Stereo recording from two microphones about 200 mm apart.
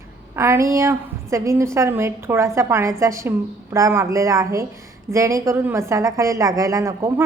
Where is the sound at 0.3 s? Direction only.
15° right (ahead or behind).